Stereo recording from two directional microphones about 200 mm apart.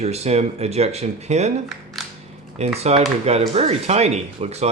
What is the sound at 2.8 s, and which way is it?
Speech, 30° right (ahead or behind).